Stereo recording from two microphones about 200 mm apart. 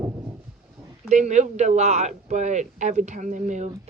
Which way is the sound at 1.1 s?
35° right (ahead or behind).